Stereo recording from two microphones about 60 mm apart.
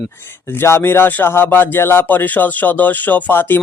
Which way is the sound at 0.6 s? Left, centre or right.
Left.